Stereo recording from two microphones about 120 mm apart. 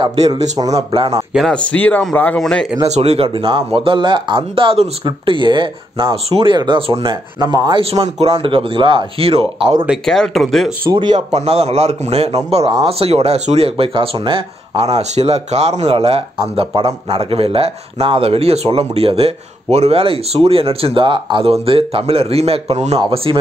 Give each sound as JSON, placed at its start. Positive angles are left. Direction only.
{"t": 0.0, "sound": "speech", "side_deg": -40}
{"t": 0.6, "sound": "speech", "side_deg": -30}
{"t": 1.3, "sound": "speech", "side_deg": 0}
{"t": 1.7, "sound": "speech", "side_deg": 15}
{"t": 2.4, "sound": "speech", "side_deg": 0}
{"t": 2.9, "sound": "speech", "side_deg": -60}
{"t": 7.8, "sound": "speech", "side_deg": -55}
{"t": 10.0, "sound": "speech", "side_deg": 5}
{"t": 10.9, "sound": "speech", "side_deg": -40}
{"t": 11.1, "sound": "speech", "side_deg": -60}
{"t": 14.8, "sound": "speech", "side_deg": -65}